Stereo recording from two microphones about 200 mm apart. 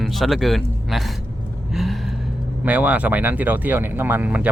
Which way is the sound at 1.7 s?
Centre (ahead or behind).